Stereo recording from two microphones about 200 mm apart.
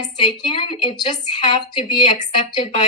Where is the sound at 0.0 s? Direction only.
25° left (ahead or behind).